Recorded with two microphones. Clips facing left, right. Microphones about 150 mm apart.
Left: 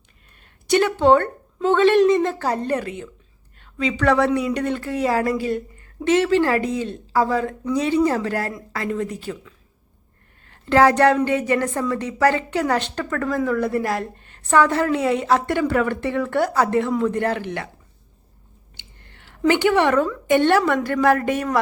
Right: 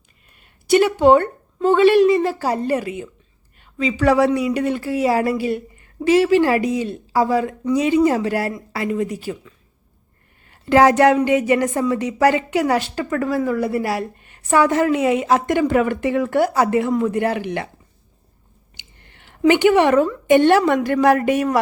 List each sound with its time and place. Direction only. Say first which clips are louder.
0.7 s a woman's voice: right 3 dB; 10° right (ahead or behind)
18.8 s a sound: even; 15° right (ahead or behind)
20.2 s a woman's voice: right 3 dB; 15° right (ahead or behind)